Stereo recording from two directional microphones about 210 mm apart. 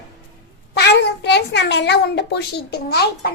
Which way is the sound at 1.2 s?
50° left (ahead or behind).